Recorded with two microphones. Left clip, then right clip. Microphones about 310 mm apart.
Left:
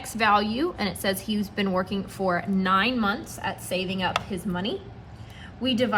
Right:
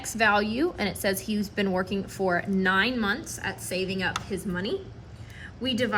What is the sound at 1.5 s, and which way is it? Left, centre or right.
A woman's voice, centre.